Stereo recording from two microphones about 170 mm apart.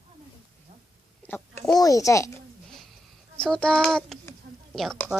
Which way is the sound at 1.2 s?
10° left (ahead or behind).